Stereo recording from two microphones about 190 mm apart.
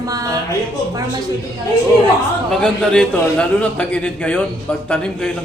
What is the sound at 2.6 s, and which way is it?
A man's voice, 5° left (ahead or behind).